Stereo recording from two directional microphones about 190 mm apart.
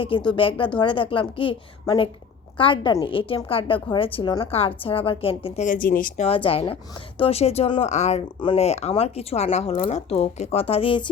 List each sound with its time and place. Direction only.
0.0 s a woman's voice: 25° left (ahead or behind)